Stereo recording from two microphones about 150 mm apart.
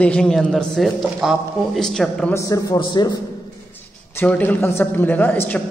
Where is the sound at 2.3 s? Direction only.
20° left (ahead or behind).